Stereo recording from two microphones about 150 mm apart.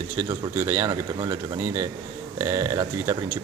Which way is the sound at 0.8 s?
30° right (ahead or behind).